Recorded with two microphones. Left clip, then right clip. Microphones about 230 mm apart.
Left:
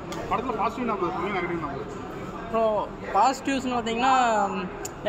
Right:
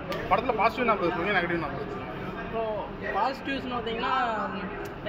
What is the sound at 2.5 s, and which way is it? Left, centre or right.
A man's voice, left.